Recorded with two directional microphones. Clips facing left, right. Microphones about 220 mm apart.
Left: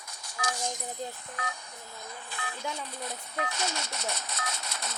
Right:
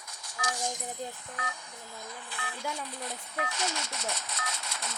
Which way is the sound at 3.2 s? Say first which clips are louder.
Left 1 dB; 40° left (ahead or behind).